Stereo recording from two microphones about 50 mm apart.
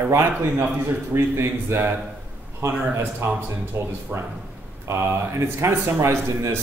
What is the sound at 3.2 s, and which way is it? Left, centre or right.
Speech, right.